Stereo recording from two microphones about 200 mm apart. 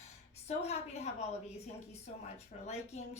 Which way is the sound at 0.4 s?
30° left (ahead or behind).